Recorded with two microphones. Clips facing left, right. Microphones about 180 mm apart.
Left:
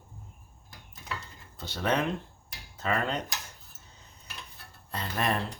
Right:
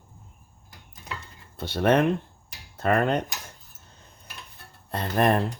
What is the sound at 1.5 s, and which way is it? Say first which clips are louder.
Speech: right 8 dB; 55° right (ahead or behind).